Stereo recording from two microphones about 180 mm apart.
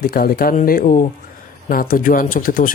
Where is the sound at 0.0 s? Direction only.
55° left (ahead or behind).